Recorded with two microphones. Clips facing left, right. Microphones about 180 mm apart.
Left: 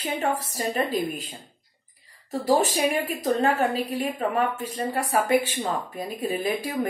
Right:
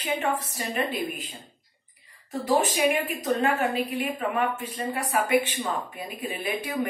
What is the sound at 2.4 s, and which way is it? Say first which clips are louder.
Speech: left 1 dB; 35° left (ahead or behind).